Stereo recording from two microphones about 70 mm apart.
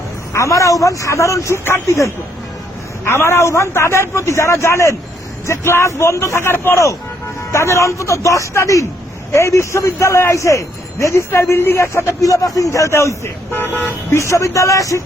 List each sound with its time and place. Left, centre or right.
0.3 s a man's voice: left
12.2 s speech: left